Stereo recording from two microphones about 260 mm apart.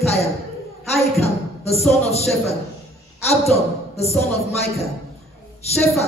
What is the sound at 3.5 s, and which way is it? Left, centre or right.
A woman's voice, left.